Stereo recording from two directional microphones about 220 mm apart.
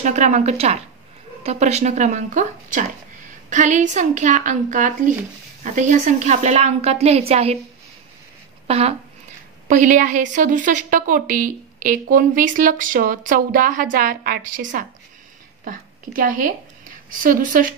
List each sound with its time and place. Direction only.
0.0 s a woman's voice: 35° right (ahead or behind)
8.6 s a woman's voice: 25° right (ahead or behind)